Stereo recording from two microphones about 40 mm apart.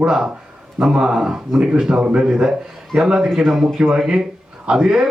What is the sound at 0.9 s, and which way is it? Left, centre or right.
Speech, centre.